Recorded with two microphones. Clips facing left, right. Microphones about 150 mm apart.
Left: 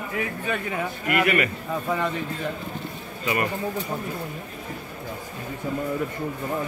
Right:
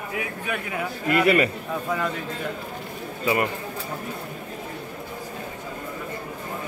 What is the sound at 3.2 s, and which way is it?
Speech, 20° right (ahead or behind).